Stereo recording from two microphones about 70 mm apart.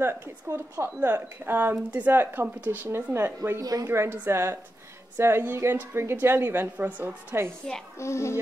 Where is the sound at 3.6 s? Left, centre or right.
Right.